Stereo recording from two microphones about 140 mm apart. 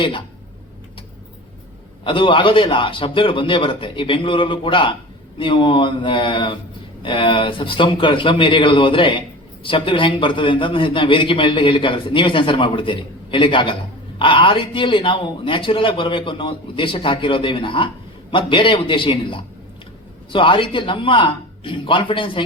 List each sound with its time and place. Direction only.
2.0 s a man's voice: 35° left (ahead or behind)